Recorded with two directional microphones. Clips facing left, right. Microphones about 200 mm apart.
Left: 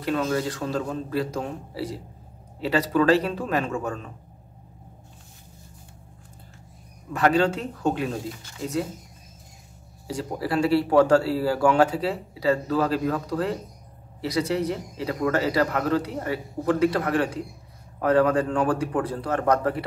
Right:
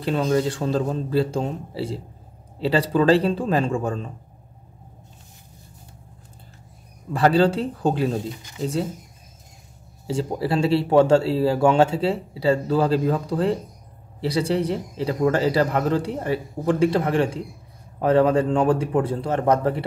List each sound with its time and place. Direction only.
0.0 s a man's voice: 30° right (ahead or behind)
7.1 s a man's voice: 30° right (ahead or behind)
10.0 s a man's voice: 25° right (ahead or behind)